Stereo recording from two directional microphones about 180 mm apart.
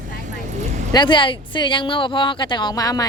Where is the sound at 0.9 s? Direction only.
25° left (ahead or behind).